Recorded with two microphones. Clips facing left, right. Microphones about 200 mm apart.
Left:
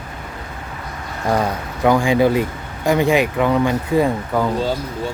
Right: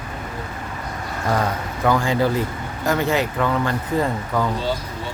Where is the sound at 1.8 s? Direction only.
15° left (ahead or behind).